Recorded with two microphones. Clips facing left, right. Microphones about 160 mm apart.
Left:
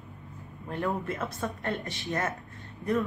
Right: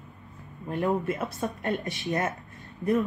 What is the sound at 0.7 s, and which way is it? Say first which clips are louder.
Speech: right 4 dB; 20° right (ahead or behind).